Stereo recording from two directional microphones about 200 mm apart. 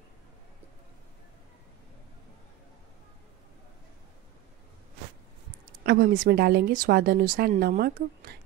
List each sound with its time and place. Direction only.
5.9 s a woman's voice: 45° right (ahead or behind)